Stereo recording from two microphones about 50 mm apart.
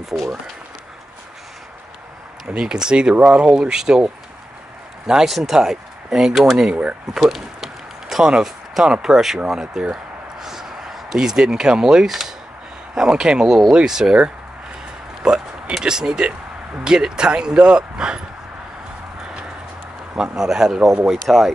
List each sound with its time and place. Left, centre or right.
0.1 s speech: centre
2.4 s speech: centre
5.0 s speech: centre
7.2 s a sound: centre
8.3 s speech: centre
15.2 s speech: centre
20.2 s speech: centre